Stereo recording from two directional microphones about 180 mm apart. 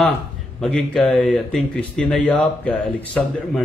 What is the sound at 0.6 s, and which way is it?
Speech, 5° left (ahead or behind).